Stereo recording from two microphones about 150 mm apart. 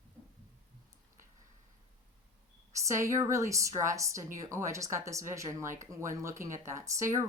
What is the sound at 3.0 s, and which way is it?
Speech, 20° right (ahead or behind).